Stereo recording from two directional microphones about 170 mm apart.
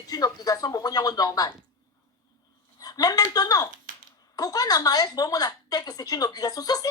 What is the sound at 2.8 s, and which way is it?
A woman's voice, 20° left (ahead or behind).